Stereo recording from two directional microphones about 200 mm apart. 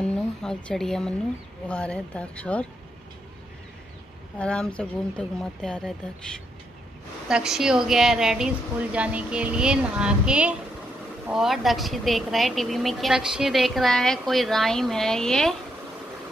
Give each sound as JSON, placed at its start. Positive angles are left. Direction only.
{"t": 0.0, "sound": "a sound", "side_deg": 5}
{"t": 1.7, "sound": "speech", "side_deg": 5}
{"t": 4.4, "sound": "speech", "side_deg": 5}